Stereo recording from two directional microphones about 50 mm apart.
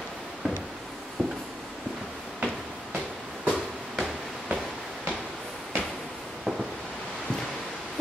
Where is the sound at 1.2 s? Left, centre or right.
Centre.